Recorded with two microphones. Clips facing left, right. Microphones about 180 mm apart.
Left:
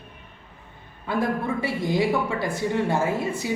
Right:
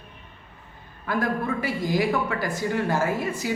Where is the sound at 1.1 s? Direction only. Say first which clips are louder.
Left 1 dB; 25° left (ahead or behind).